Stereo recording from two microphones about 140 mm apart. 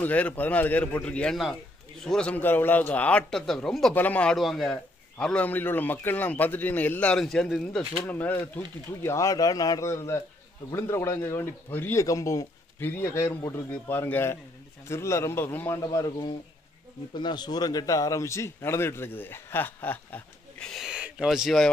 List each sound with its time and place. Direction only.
0.0 s speech: 10° left (ahead or behind)
8.1 s a man's voice: 10° left (ahead or behind)